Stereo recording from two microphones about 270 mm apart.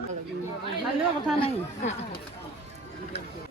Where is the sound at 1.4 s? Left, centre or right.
Left.